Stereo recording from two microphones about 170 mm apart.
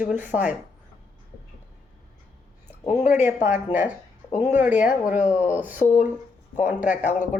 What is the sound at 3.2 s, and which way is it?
A woman's voice, 10° right (ahead or behind).